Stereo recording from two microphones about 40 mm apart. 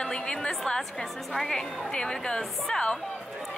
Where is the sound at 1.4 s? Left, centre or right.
Centre.